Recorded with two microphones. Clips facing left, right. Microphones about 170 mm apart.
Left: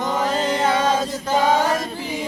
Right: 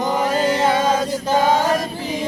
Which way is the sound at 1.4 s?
20° right (ahead or behind).